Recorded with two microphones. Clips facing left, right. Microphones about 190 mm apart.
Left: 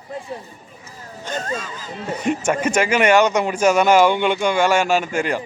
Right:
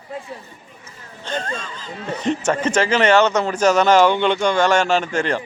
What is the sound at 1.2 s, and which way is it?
A man's voice, 10° left (ahead or behind).